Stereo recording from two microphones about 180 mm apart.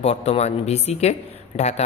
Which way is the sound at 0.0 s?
35° left (ahead or behind).